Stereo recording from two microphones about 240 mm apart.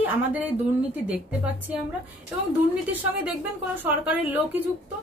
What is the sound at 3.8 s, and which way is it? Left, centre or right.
Speech, centre.